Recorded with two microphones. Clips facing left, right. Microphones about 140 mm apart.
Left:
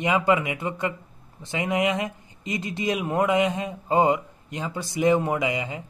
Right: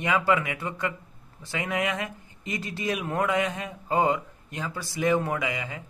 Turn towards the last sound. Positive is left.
turn(degrees=20)  # may be behind; listen again after turning